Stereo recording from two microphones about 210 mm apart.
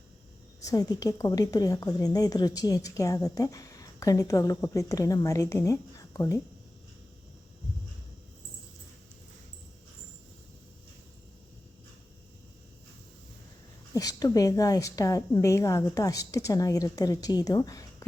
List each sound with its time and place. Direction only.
0.6 s a woman's voice: 15° left (ahead or behind)
13.9 s a woman's voice: 15° left (ahead or behind)